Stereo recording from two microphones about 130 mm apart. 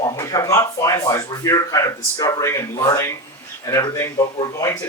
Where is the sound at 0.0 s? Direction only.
25° left (ahead or behind).